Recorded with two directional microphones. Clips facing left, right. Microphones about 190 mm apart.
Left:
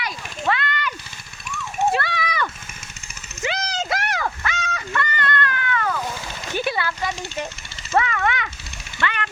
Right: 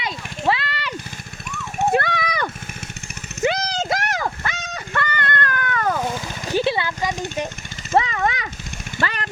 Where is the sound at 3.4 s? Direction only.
50° right (ahead or behind).